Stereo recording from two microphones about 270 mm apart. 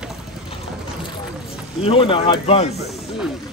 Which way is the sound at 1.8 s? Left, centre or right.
Centre.